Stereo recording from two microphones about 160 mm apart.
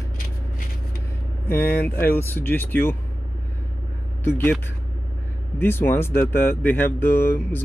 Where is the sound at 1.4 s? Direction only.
15° left (ahead or behind).